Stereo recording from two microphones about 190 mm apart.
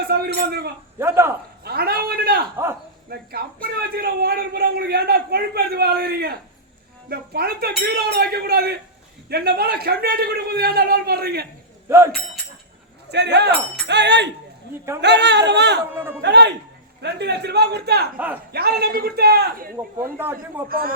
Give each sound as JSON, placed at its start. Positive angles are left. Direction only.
{"t": 0.1, "sound": "a man's voice", "side_deg": -55}
{"t": 0.9, "sound": "a man's voice", "side_deg": -15}
{"t": 1.6, "sound": "a man's voice", "side_deg": -55}
{"t": 11.9, "sound": "speech", "side_deg": -15}
{"t": 13.1, "sound": "a man's voice", "side_deg": -60}
{"t": 20.1, "sound": "a man's voice", "side_deg": -10}
{"t": 20.7, "sound": "a man's voice", "side_deg": -50}